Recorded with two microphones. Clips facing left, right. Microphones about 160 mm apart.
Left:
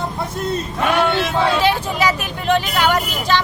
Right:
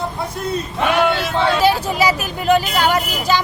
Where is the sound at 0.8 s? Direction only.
Centre (ahead or behind).